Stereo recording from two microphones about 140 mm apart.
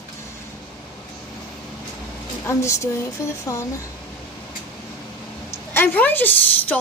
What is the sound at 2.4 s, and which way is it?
Speech, 20° left (ahead or behind).